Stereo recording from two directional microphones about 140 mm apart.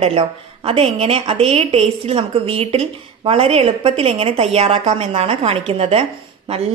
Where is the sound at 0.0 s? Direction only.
45° right (ahead or behind).